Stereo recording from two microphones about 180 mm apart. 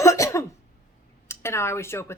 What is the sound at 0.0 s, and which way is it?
Cough, 15° left (ahead or behind).